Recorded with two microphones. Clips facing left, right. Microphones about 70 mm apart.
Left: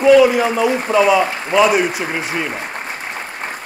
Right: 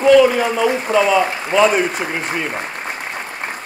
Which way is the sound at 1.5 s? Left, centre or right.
Centre.